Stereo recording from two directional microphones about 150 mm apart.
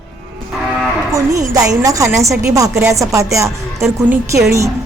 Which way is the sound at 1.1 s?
20° right (ahead or behind).